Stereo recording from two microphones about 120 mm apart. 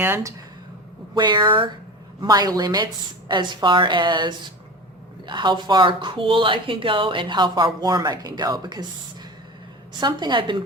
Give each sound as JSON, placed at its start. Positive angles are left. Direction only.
{"t": 0.0, "sound": "speech", "side_deg": -25}
{"t": 1.1, "sound": "speech", "side_deg": -40}
{"t": 2.2, "sound": "speech", "side_deg": -35}
{"t": 10.0, "sound": "speech", "side_deg": -35}